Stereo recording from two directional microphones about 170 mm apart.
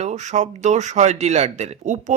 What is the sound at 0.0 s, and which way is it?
A man's voice, 45° right (ahead or behind).